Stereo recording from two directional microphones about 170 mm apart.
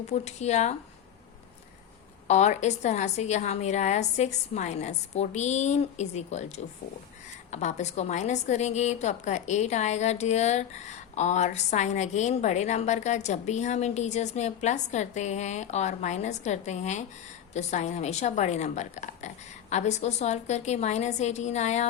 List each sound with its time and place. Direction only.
0.1 s a woman's voice: 40° left (ahead or behind)
2.2 s a woman's voice: 45° left (ahead or behind)